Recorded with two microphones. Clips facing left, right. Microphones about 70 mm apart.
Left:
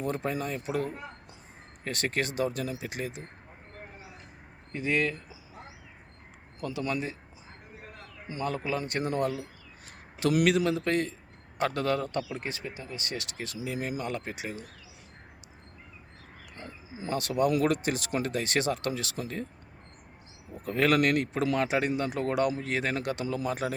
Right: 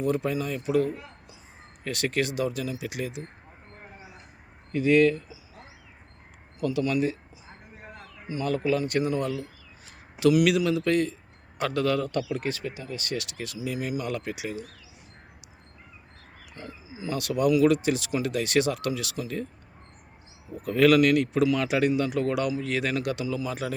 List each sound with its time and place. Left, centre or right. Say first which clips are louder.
0.0 s speech: right 4 dB; left
4.7 s speech: right 9 dB; left
6.6 s speech: right 7 dB; left
8.3 s speech: right 5 dB; left
16.6 s speech: right 2 dB; left
20.6 s speech: right 5 dB; left